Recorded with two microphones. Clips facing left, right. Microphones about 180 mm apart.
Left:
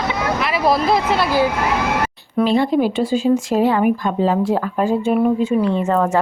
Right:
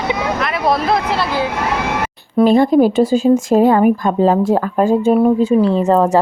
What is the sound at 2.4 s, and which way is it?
Speech, 45° right (ahead or behind).